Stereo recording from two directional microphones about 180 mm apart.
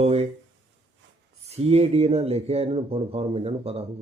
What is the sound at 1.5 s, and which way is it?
Speech, 35° right (ahead or behind).